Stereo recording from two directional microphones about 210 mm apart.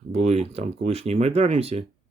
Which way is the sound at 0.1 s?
30° right (ahead or behind).